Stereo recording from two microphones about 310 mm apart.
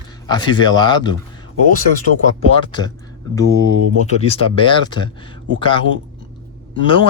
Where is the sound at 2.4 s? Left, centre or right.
Centre.